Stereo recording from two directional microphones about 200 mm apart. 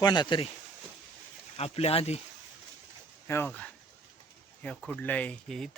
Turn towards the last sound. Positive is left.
turn(degrees=5)  # may be behind; listen again after turning